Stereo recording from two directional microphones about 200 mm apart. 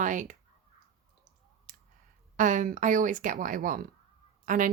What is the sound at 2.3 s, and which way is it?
Speech, 40° right (ahead or behind).